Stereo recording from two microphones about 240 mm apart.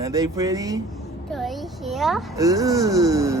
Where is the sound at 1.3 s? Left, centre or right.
Centre.